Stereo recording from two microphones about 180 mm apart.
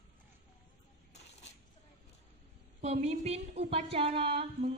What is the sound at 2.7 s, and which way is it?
A woman's voice, 40° right (ahead or behind).